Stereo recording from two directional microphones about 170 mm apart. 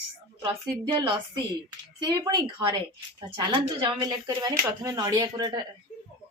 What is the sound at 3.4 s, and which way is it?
Speech, 25° right (ahead or behind).